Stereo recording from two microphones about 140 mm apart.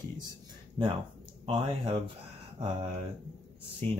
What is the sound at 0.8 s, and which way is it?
Speech, 35° right (ahead or behind).